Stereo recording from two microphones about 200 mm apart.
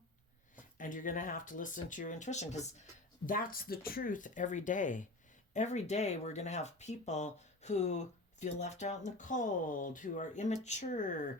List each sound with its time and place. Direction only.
0.5 s speech: 40° left (ahead or behind)
3.2 s speech: 45° left (ahead or behind)